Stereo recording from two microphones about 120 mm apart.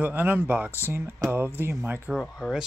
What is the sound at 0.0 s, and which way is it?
Speech, 15° right (ahead or behind).